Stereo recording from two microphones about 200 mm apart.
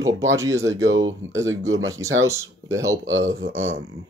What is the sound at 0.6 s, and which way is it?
Speech, 70° right (ahead or behind).